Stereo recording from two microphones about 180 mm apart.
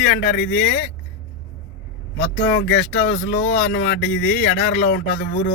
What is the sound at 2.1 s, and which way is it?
Speech, 50° left (ahead or behind).